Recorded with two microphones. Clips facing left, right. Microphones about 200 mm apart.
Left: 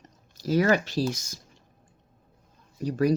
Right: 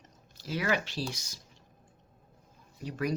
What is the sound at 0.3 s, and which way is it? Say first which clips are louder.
Speech: left 9 dB; 40° left (ahead or behind).